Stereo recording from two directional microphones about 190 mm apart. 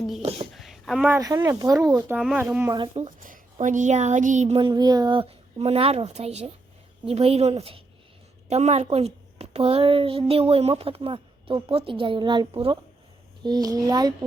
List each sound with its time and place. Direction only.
0.2 s a woman's voice: 30° right (ahead or behind)
0.5 s a sound: centre (ahead or behind)
1.0 s speech: 15° right (ahead or behind)
2.1 s speech: 5° right (ahead or behind)
2.7 s speech: 30° right (ahead or behind)
3.2 s a woman's voice: 45° right (ahead or behind); by 14.3 s 20° right (ahead or behind)